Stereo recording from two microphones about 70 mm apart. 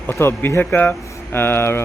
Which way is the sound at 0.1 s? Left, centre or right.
Left.